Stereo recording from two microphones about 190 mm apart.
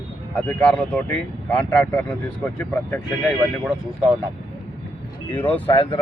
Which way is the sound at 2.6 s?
10° left (ahead or behind).